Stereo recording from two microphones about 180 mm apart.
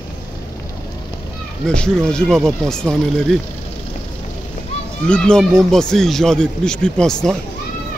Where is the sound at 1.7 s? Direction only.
5° left (ahead or behind).